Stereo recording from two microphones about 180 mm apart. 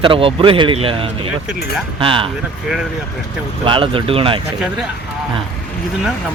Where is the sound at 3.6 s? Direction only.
30° right (ahead or behind).